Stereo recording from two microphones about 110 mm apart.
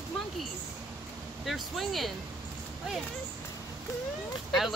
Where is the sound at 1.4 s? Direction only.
Centre (ahead or behind).